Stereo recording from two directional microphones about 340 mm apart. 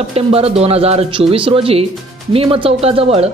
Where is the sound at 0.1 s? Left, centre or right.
Centre.